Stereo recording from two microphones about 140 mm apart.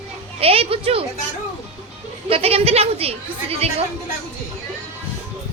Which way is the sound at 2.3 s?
45° right (ahead or behind).